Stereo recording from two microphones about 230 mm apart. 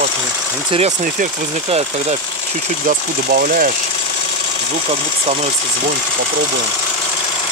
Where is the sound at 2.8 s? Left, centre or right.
Right.